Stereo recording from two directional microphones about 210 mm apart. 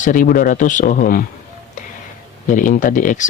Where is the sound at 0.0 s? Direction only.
40° left (ahead or behind).